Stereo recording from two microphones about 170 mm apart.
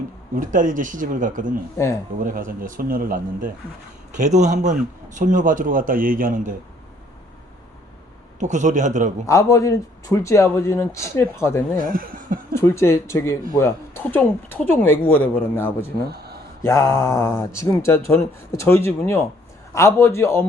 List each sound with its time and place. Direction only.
0.3 s speech: 50° right (ahead or behind)
4.2 s speech: 45° right (ahead or behind)
8.4 s speech: 45° right (ahead or behind)
9.2 s speech: 20° left (ahead or behind)
11.8 s speech: 55° right (ahead or behind)
12.5 s speech: 15° left (ahead or behind)
16.1 s a sound: 70° right (ahead or behind)
16.6 s speech: 15° left (ahead or behind)